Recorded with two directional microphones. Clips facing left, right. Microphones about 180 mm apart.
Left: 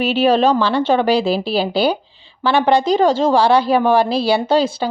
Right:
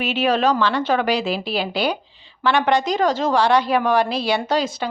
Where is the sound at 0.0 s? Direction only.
30° left (ahead or behind).